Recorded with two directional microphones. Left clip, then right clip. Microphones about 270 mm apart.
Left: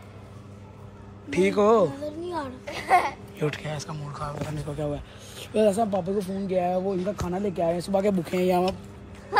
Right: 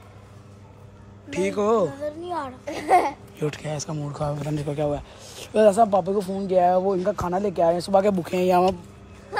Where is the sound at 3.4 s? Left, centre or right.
Centre.